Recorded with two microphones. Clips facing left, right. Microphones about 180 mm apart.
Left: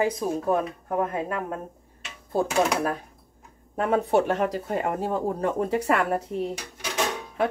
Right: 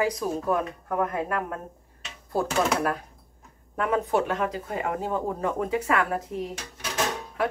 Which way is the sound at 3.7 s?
35° left (ahead or behind).